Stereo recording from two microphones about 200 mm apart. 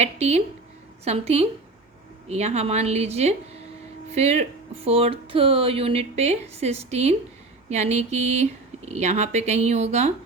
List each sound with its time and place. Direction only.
0.0 s speech: 30° right (ahead or behind)